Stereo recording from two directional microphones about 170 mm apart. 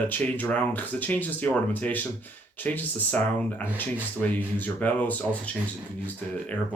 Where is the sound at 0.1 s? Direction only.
10° left (ahead or behind).